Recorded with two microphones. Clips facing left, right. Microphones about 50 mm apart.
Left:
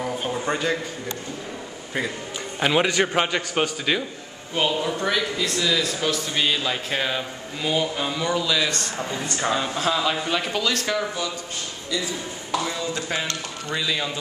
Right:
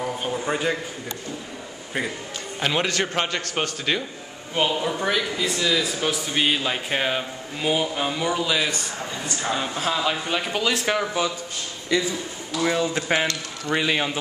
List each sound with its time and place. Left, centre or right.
0.0 s a sound: centre
2.6 s a man's voice: centre
3.5 s speech: centre
8.6 s speech: centre
10.5 s speech: centre
11.9 s speech: right